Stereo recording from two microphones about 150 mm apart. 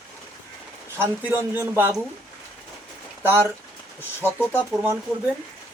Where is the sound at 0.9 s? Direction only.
15° right (ahead or behind).